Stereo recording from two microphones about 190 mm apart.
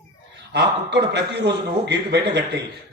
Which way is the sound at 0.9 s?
60° right (ahead or behind).